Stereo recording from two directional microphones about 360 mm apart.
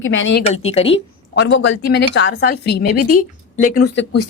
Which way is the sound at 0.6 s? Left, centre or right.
Centre.